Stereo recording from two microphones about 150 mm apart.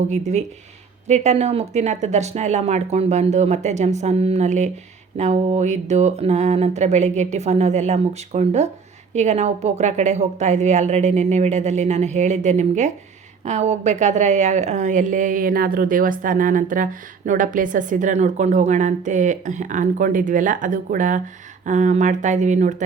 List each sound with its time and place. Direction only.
0.1 s a woman's voice: 50° right (ahead or behind)